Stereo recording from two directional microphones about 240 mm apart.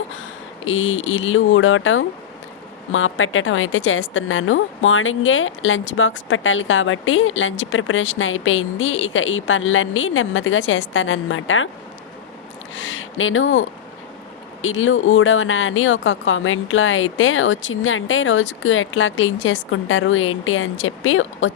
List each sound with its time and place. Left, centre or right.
0.6 s a woman's voice: left
12.7 s a woman's voice: left